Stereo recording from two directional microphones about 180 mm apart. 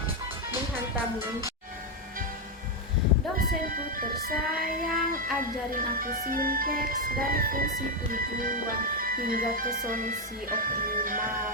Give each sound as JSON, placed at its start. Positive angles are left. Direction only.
{"t": 3.3, "sound": "music", "side_deg": -50}